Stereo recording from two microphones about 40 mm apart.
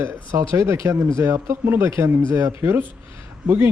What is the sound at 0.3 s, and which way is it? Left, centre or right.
Speech, right.